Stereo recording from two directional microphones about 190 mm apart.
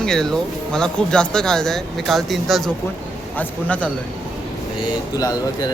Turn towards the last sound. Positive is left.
turn(degrees=20)  # may be behind; listen again after turning